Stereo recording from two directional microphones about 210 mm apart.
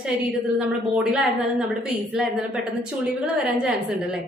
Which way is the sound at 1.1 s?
5° right (ahead or behind).